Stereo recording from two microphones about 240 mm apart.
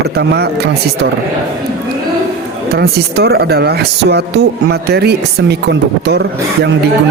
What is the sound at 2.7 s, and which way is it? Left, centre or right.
Speech, right.